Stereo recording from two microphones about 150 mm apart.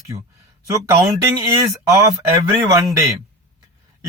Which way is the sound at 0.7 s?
20° right (ahead or behind).